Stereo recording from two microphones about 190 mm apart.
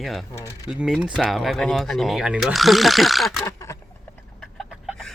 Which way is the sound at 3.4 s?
15° left (ahead or behind).